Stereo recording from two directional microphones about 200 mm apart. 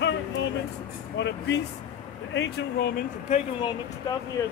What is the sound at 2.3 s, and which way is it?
Speech, 55° left (ahead or behind).